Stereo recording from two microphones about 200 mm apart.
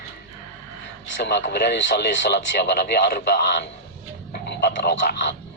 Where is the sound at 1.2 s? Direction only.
60° left (ahead or behind).